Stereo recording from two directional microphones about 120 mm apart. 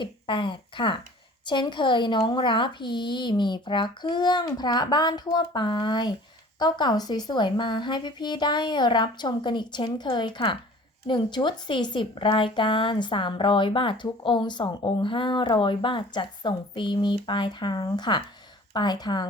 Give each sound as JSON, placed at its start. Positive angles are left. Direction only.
{"t": 0.0, "sound": "speech", "side_deg": 45}